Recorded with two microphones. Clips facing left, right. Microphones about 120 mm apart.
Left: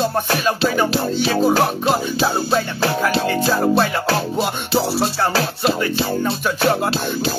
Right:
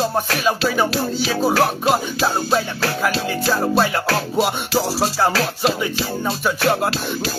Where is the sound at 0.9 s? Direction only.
20° left (ahead or behind).